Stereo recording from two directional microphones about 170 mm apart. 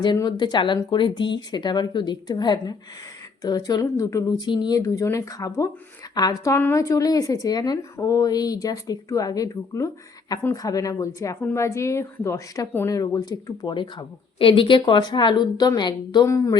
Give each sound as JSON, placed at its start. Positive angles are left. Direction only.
{"t": 0.0, "sound": "a woman's voice", "side_deg": 25}